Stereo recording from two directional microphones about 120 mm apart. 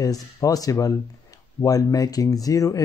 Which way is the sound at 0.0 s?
30° left (ahead or behind).